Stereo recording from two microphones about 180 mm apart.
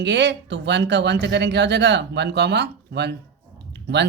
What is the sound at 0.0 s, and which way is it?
Speech, 75° right (ahead or behind).